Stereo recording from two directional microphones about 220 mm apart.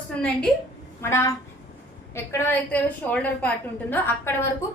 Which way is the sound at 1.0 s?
10° left (ahead or behind).